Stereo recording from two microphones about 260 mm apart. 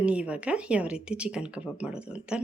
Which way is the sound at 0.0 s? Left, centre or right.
Centre.